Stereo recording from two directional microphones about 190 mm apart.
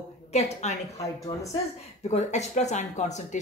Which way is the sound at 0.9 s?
15° left (ahead or behind).